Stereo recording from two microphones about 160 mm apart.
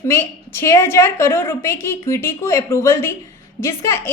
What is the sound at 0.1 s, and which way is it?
A woman's voice, 15° left (ahead or behind).